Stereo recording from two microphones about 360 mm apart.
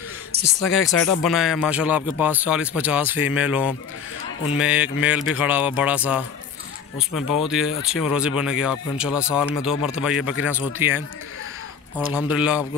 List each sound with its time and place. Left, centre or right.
0.8 s speech: centre
12.1 s speech: centre